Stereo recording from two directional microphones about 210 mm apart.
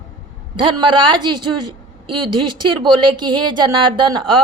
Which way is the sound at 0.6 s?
20° right (ahead or behind).